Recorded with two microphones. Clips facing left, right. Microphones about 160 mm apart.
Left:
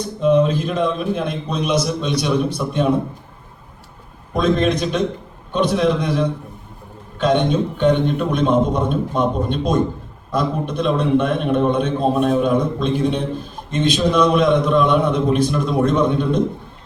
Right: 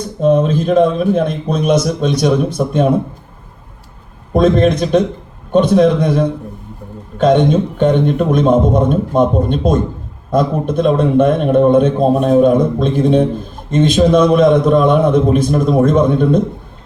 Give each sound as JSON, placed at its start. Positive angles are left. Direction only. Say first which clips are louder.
{"t": 0.2, "sound": "a man's voice", "louder": "right 3 dB", "side_deg": -45}
{"t": 4.4, "sound": "a man's voice", "louder": "right 6 dB", "side_deg": -50}
{"t": 7.2, "sound": "a man's voice", "louder": "right 6 dB", "side_deg": -50}